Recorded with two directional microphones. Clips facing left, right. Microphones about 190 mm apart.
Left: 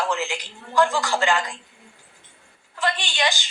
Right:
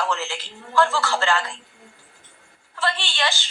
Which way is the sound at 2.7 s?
15° left (ahead or behind).